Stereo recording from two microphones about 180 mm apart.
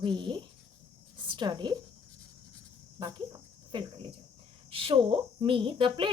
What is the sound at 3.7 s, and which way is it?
A woman's voice, 25° right (ahead or behind).